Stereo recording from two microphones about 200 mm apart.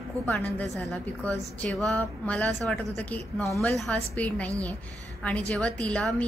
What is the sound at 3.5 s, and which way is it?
A woman's voice, centre (ahead or behind).